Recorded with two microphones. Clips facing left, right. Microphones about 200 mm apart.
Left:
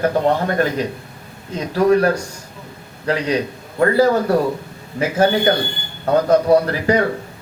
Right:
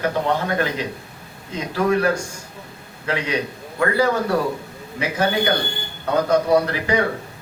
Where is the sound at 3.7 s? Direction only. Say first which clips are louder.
Left 5 dB; 40° left (ahead or behind).